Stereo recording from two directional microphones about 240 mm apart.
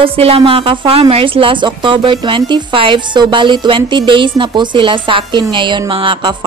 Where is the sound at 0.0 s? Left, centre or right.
Right.